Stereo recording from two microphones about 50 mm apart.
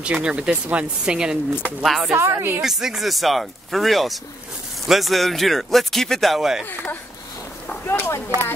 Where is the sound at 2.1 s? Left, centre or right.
Right.